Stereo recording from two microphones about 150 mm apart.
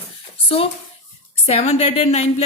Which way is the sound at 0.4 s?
40° left (ahead or behind).